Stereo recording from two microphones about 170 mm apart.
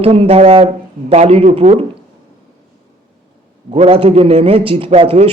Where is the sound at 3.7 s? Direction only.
35° right (ahead or behind).